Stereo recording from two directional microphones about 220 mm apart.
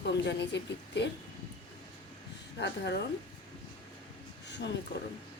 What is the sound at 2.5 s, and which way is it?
Speech, 50° left (ahead or behind).